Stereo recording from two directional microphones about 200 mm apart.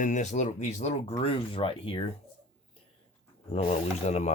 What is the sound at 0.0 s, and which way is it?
Speech, 35° left (ahead or behind).